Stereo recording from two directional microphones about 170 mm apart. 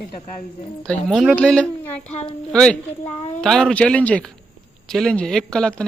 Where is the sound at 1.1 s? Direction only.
Centre (ahead or behind).